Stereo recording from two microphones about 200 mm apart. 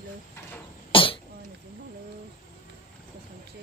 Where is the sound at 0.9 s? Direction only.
25° left (ahead or behind).